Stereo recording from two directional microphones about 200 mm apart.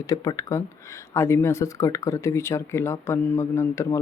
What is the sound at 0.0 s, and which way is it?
Speech, 15° left (ahead or behind).